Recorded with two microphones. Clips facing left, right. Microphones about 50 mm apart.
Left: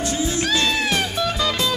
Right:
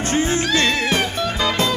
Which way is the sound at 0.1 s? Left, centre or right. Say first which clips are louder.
Right 6 dB; right.